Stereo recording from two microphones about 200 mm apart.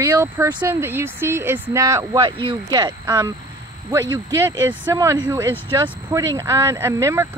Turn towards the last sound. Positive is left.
turn(degrees=-15)  # may be behind; listen again after turning